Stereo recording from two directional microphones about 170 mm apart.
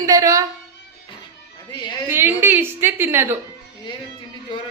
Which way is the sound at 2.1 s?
15° right (ahead or behind).